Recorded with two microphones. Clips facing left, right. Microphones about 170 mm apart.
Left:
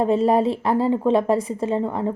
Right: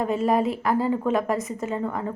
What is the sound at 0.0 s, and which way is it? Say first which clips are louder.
A woman's voice: left 4 dB; 30° left (ahead or behind).